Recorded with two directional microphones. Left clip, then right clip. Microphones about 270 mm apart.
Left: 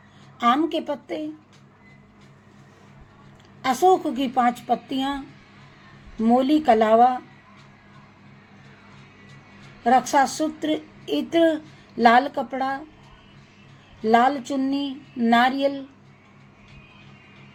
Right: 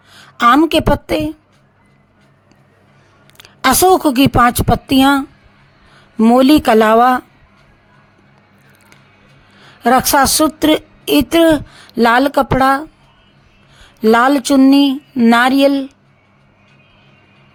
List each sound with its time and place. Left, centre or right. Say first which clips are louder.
0.3 s a woman's voice: right 11 dB; right
3.3 s a woman's voice: right 11 dB; right
6.2 s speech: right 9 dB; right
9.8 s speech: right 7 dB; right
14.0 s speech: right 8 dB; right